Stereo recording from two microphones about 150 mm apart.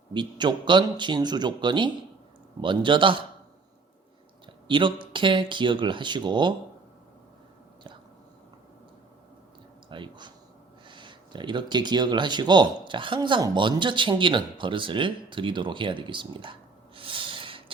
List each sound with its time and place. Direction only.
0.1 s speech: 30° right (ahead or behind)
4.4 s speech: 35° right (ahead or behind)
9.9 s speech: 30° right (ahead or behind)